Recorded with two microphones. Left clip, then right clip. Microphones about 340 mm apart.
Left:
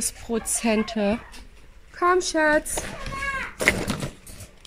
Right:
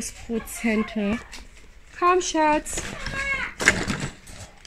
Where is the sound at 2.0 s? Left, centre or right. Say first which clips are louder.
Even; centre.